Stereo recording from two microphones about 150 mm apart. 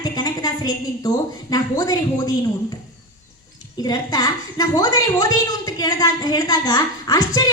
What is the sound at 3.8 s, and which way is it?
A woman's voice, 25° left (ahead or behind).